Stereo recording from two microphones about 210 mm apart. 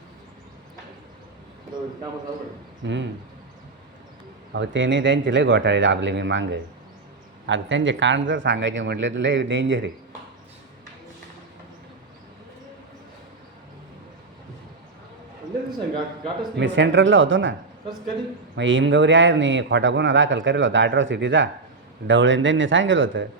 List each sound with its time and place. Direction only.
2.8 s speech: 60° right (ahead or behind)
4.5 s speech: 60° right (ahead or behind)
16.6 s speech: 60° right (ahead or behind)
18.5 s speech: 65° right (ahead or behind)